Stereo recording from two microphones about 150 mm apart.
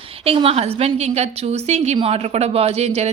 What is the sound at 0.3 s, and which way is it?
A woman's voice, 40° right (ahead or behind).